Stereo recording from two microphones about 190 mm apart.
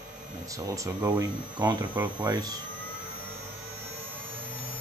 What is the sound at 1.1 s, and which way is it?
Speech, 20° right (ahead or behind).